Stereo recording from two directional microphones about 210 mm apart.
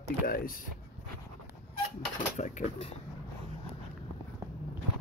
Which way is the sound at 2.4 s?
35° left (ahead or behind).